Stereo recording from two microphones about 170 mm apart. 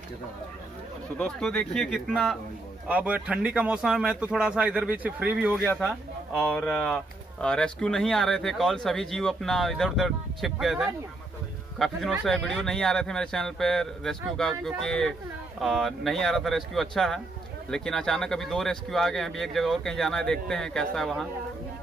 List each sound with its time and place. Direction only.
1.1 s speech: 5° left (ahead or behind); by 5.8 s 15° right (ahead or behind)
5.8 s speech: 5° left (ahead or behind)